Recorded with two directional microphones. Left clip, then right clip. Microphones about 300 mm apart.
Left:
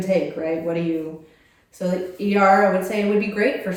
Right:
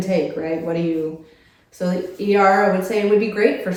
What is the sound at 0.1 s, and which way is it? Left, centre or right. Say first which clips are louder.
Speech: even; centre.